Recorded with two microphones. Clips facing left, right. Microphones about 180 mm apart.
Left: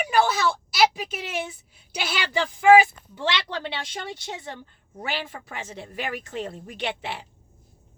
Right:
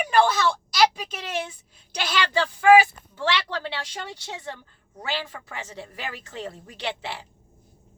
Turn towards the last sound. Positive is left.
turn(degrees=15)  # may be behind; listen again after turning